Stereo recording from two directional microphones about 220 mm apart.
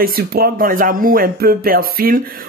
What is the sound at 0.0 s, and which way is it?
Speech, 45° right (ahead or behind).